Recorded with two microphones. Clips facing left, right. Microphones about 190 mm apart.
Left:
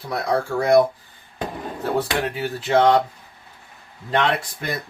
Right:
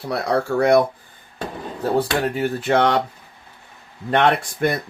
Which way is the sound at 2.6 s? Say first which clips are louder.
Left 2 dB; 65° right (ahead or behind).